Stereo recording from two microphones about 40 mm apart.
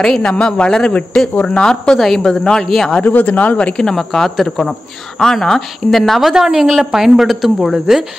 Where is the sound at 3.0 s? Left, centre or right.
Left.